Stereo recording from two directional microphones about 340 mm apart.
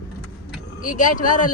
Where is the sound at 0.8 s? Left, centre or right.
Left.